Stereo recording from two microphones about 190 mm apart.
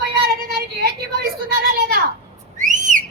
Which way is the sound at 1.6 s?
50° right (ahead or behind).